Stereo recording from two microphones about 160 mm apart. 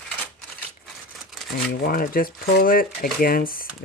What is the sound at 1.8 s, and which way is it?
Speech, 65° left (ahead or behind).